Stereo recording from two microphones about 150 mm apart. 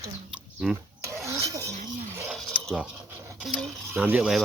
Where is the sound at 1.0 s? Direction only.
20° right (ahead or behind).